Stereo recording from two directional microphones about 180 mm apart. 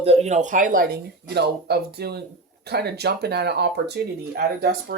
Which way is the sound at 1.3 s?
65° right (ahead or behind).